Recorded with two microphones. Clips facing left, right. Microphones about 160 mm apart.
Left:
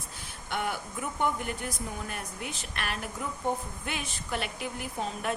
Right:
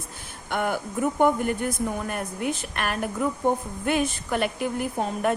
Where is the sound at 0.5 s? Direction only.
50° right (ahead or behind).